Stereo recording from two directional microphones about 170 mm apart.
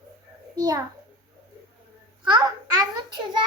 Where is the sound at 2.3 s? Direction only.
25° right (ahead or behind).